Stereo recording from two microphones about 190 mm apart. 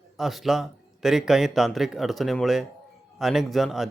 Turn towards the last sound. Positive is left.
turn(degrees=0)  # may be behind; listen again after turning